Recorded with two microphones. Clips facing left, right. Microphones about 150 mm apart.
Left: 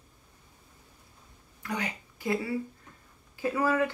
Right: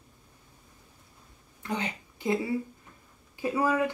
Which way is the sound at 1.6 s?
25° right (ahead or behind).